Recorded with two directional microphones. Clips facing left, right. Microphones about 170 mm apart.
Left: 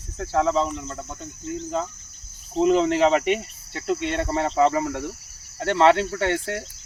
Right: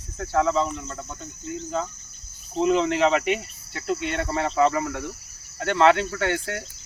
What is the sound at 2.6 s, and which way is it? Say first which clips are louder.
Speech: left 2 dB; 35° left (ahead or behind).